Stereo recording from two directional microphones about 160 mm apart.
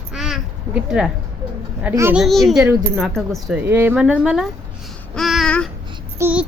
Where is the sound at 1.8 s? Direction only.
15° right (ahead or behind).